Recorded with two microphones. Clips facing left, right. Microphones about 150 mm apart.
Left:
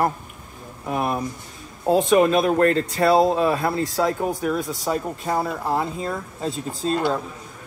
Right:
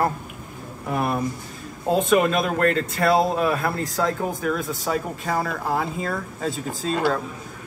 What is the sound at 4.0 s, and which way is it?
Speech, 15° left (ahead or behind).